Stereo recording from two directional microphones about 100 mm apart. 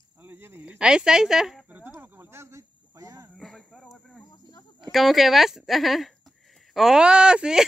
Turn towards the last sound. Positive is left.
turn(degrees=-10)  # may be behind; listen again after turning